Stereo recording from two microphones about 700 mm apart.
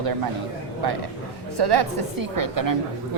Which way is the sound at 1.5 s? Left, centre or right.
Right.